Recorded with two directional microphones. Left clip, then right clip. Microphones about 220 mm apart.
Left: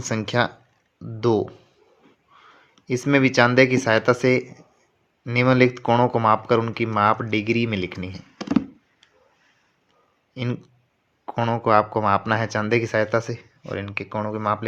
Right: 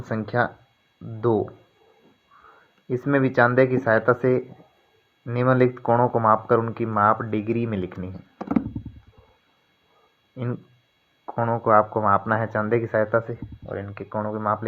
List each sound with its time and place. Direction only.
0.0 s speech: 30° left (ahead or behind)
2.9 s speech: 25° left (ahead or behind)
3.5 s speech: 30° left (ahead or behind)
11.3 s speech: 35° left (ahead or behind)